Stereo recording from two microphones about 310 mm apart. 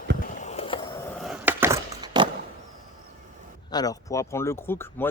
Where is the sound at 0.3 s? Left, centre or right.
Left.